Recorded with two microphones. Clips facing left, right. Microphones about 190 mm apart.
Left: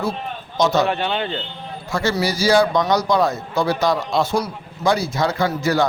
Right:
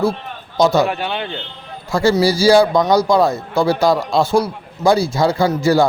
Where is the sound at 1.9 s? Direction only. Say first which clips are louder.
Right 7 dB; 35° right (ahead or behind).